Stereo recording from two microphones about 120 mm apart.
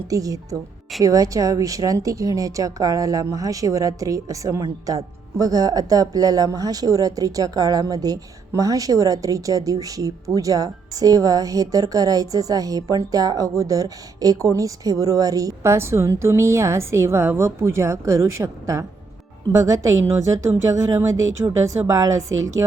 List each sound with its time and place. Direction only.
0.1 s speech: 30° right (ahead or behind)